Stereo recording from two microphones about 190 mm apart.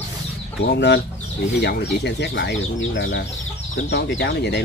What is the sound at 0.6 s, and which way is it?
Speech, 60° left (ahead or behind).